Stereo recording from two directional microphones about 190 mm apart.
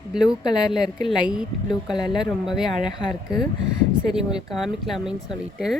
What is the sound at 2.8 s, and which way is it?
Speech, 25° left (ahead or behind).